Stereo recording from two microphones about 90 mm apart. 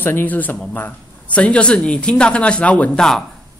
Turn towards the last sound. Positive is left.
turn(degrees=5)  # may be behind; listen again after turning